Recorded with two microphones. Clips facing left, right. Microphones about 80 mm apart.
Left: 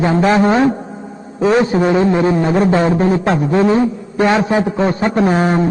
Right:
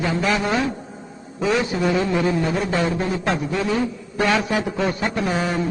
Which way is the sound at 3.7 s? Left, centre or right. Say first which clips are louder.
Left 8 dB; left.